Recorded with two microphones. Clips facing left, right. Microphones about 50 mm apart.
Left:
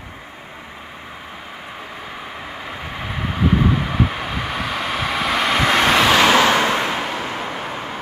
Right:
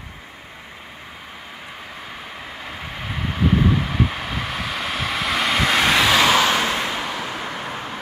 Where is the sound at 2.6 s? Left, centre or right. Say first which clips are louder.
Left 2 dB; centre.